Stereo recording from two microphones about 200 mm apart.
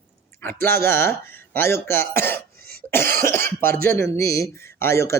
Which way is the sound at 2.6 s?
50° right (ahead or behind).